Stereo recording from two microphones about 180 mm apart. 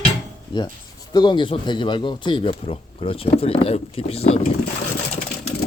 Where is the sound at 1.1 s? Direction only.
25° left (ahead or behind).